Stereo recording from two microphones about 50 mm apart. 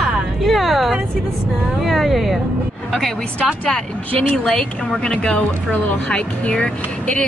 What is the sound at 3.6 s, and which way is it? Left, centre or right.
Speech, left.